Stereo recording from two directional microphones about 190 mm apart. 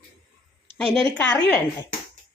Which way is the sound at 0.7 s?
25° right (ahead or behind).